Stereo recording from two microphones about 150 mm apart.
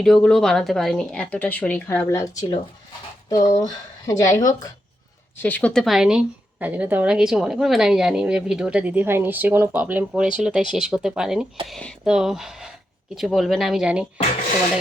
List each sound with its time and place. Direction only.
0.0 s speech: 5° left (ahead or behind)
3.2 s speech: 25° left (ahead or behind)
5.4 s a woman's voice: 10° left (ahead or behind); by 14.1 s 5° right (ahead or behind)